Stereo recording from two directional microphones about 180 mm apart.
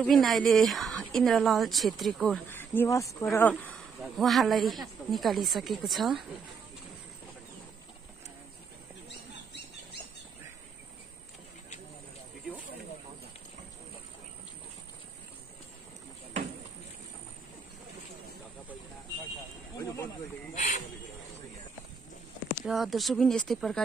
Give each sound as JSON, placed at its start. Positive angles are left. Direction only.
{"t": 0.0, "sound": "a woman's voice", "side_deg": 0}
{"t": 2.5, "sound": "a woman's voice", "side_deg": 10}
{"t": 19.7, "sound": "snake", "side_deg": 15}
{"t": 22.7, "sound": "a woman's voice", "side_deg": 0}